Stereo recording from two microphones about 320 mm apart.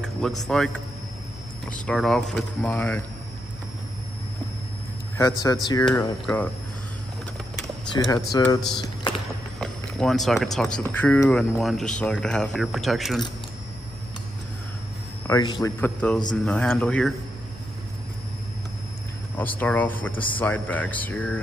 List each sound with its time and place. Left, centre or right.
0.2 s a man's voice: centre
1.7 s a man's voice: centre
5.1 s a man's voice: centre
7.9 s a man's voice: centre
8.7 s a sound: centre
9.6 s a man's voice: centre
15.2 s a man's voice: centre
19.6 s a man's voice: centre